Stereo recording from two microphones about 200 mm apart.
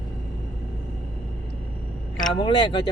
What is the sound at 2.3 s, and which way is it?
Speech, 25° left (ahead or behind).